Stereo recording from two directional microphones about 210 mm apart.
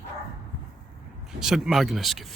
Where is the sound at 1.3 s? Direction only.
Centre (ahead or behind).